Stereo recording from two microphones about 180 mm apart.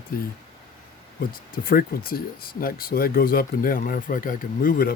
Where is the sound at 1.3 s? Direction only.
55° left (ahead or behind).